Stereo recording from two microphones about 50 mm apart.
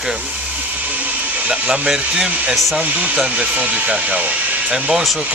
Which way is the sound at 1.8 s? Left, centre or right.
Centre.